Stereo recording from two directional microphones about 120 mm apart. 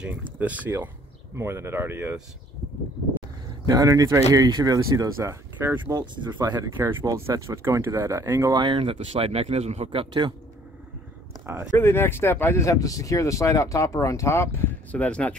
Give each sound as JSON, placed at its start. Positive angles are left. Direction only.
{"t": 0.0, "sound": "speech", "side_deg": -15}
{"t": 3.6, "sound": "speech", "side_deg": -30}
{"t": 5.9, "sound": "speech", "side_deg": -35}
{"t": 6.9, "sound": "speech", "side_deg": -20}
{"t": 8.5, "sound": "speech", "side_deg": -45}
{"t": 8.9, "sound": "a man's voice", "side_deg": -60}
{"t": 9.8, "sound": "speech", "side_deg": -40}
{"t": 11.7, "sound": "speech", "side_deg": 20}
{"t": 14.9, "sound": "speech", "side_deg": 10}